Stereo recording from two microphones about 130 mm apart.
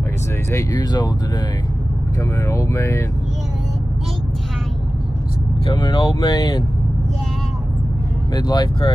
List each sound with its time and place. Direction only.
0.5 s speech: 25° left (ahead or behind)
2.4 s speech: 20° left (ahead or behind)
5.8 s speech: 30° left (ahead or behind)
8.4 s speech: 30° left (ahead or behind)